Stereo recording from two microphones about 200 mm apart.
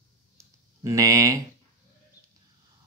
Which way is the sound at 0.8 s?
15° right (ahead or behind).